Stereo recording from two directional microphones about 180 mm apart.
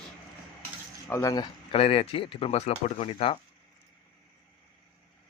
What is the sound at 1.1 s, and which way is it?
Speech, 20° left (ahead or behind).